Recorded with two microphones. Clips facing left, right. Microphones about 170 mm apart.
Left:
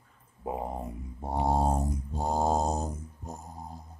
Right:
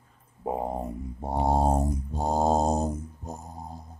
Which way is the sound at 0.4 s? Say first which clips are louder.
Right 4 dB; 25° right (ahead or behind).